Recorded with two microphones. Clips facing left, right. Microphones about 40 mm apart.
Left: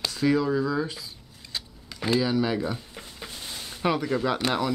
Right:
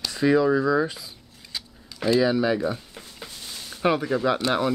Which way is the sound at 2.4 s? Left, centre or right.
Centre.